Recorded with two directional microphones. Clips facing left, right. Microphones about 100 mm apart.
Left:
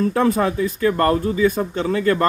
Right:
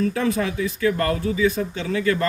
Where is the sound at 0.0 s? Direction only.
45° left (ahead or behind).